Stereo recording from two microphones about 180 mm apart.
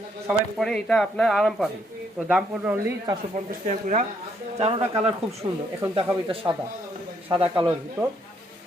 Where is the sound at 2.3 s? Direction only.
10° right (ahead or behind).